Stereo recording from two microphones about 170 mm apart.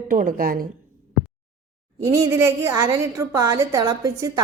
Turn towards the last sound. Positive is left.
turn(degrees=-20)  # may be behind; listen again after turning